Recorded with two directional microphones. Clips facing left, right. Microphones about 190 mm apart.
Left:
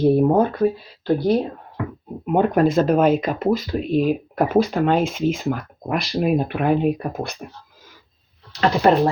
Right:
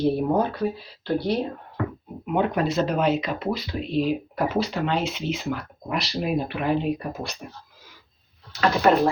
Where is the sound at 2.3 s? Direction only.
50° left (ahead or behind).